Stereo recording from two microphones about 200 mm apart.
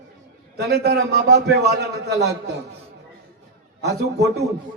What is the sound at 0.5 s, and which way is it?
A man's voice, 55° right (ahead or behind).